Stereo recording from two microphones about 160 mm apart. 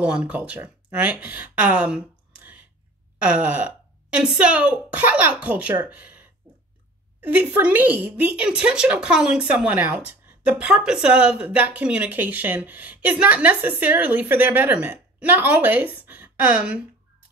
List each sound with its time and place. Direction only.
0.0 s speech: 5° right (ahead or behind)